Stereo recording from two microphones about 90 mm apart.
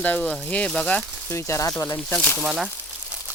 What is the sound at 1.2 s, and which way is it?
Speech, 30° left (ahead or behind).